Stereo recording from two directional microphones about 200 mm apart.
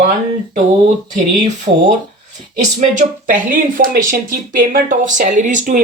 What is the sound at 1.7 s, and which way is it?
Speech, 30° right (ahead or behind).